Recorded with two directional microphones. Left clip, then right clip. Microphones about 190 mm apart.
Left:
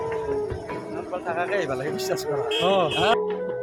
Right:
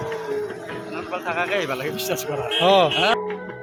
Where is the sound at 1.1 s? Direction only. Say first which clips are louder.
Right 2 dB; 5° right (ahead or behind).